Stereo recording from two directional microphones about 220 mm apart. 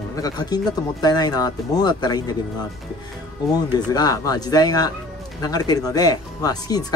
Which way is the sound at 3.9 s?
15° left (ahead or behind).